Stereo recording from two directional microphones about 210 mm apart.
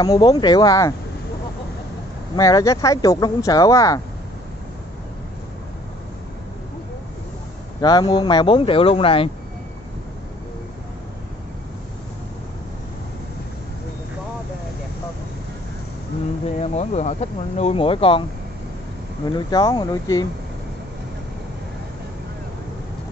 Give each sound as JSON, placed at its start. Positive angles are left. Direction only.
{"t": 0.0, "sound": "speech", "side_deg": 15}
{"t": 2.3, "sound": "speech", "side_deg": 15}
{"t": 7.8, "sound": "speech", "side_deg": 20}
{"t": 16.5, "sound": "speech", "side_deg": 30}
{"t": 19.3, "sound": "speech", "side_deg": 20}